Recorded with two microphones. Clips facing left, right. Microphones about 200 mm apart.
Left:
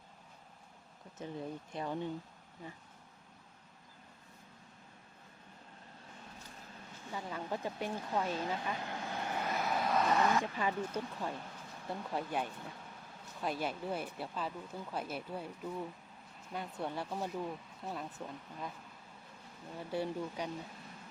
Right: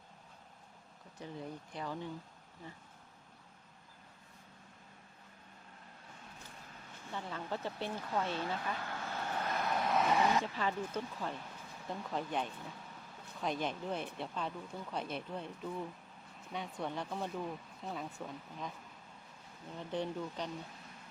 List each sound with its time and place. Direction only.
1.2 s speech: 20° left (ahead or behind)
7.1 s speech: 10° left (ahead or behind)
10.0 s speech: 10° right (ahead or behind)
10.4 s speech: 15° left (ahead or behind)
19.7 s speech: 10° left (ahead or behind)